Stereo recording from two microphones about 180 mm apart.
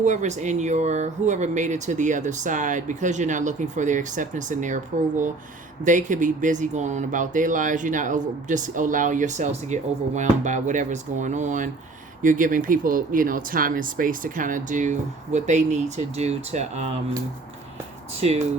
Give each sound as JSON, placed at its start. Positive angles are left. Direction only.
{"t": 0.0, "sound": "speech", "side_deg": -40}
{"t": 18.2, "sound": "speech", "side_deg": -35}